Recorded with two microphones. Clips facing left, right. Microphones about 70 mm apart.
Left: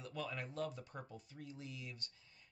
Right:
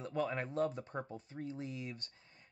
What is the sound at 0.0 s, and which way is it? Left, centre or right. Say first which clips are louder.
Speech: right 8 dB; right.